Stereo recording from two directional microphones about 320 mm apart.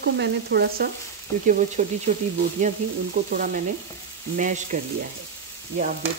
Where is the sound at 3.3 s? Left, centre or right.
Right.